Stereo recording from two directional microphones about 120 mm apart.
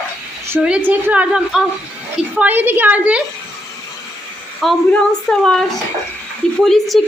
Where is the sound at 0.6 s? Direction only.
10° right (ahead or behind).